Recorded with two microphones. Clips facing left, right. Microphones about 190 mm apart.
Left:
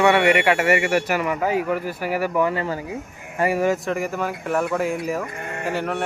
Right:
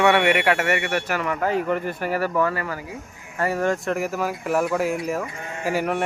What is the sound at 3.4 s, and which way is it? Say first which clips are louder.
Speech: left 2 dB; 10° left (ahead or behind).